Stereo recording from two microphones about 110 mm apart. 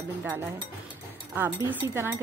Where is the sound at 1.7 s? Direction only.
20° right (ahead or behind).